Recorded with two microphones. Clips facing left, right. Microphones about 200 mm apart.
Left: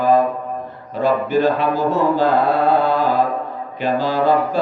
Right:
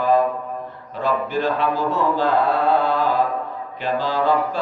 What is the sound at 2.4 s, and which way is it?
Mantra, 40° left (ahead or behind).